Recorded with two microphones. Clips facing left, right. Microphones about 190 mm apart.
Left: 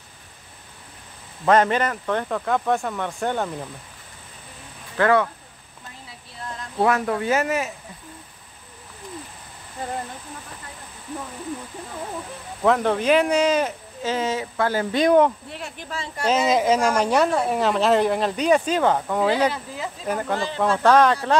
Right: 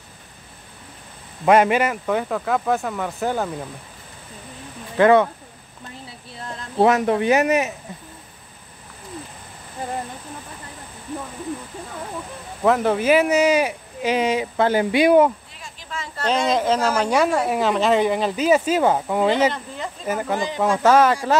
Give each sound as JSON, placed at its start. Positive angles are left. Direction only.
{"t": 1.4, "sound": "speech", "side_deg": -10}
{"t": 4.9, "sound": "speech", "side_deg": -20}
{"t": 6.8, "sound": "speech", "side_deg": -20}
{"t": 12.6, "sound": "speech", "side_deg": -5}
{"t": 15.5, "sound": "a sound", "side_deg": 65}
{"t": 16.2, "sound": "speech", "side_deg": 5}
{"t": 19.2, "sound": "speech", "side_deg": 5}
{"t": 20.3, "sound": "speech", "side_deg": -15}